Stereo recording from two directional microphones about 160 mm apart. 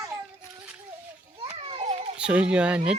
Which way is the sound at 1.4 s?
35° right (ahead or behind).